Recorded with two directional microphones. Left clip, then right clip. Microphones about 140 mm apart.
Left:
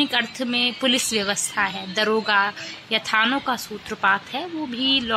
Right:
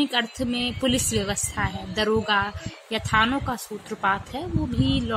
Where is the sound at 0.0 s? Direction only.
Centre (ahead or behind).